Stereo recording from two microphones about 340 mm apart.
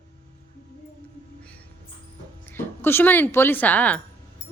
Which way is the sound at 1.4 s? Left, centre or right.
Centre.